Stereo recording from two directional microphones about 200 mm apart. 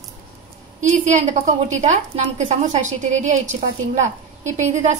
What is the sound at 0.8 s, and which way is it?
A woman's voice, 35° right (ahead or behind).